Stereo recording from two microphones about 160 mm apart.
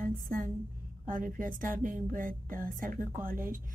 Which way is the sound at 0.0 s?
60° right (ahead or behind).